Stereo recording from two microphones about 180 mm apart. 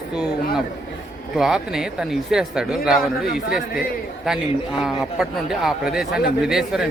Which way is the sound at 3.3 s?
55° left (ahead or behind).